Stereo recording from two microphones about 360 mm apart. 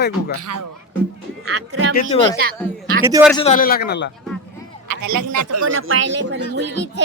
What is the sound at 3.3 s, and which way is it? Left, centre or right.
Speech, centre.